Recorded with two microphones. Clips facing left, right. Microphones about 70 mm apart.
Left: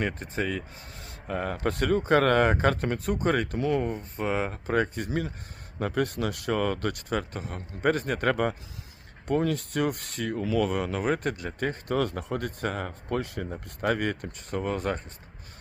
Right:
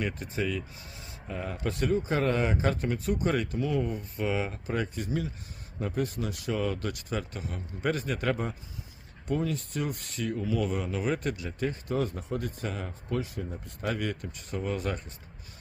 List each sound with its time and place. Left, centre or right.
0.0 s speech: left
3.9 s speech: left
11.9 s speech: left